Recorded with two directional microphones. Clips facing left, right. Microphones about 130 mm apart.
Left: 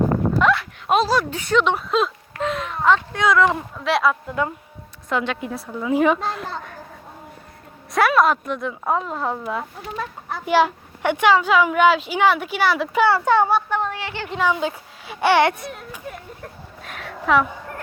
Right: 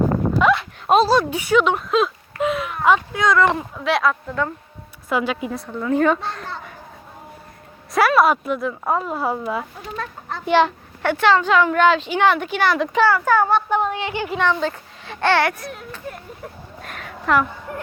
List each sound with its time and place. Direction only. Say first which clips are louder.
0.4 s a sound: right 2 dB; 5° right (ahead or behind)
0.9 s speech: right 3 dB; 30° right (ahead or behind)
1.3 s a woman's voice: right 2 dB; 10° right (ahead or behind)
2.4 s a sound: right 2 dB; 10° right (ahead or behind)
3.2 s a woman's voice: even; 5° left (ahead or behind)
5.0 s a woman's voice: right 2 dB; 5° right (ahead or behind)
7.9 s a woman's voice: right 1 dB; 5° right (ahead or behind)
13.1 s speech: left 2 dB; 25° left (ahead or behind)
13.7 s speech: right 3 dB; 15° right (ahead or behind)
14.3 s speech: even; 10° left (ahead or behind)
15.6 s a woman's voice: right 1 dB; centre (ahead or behind)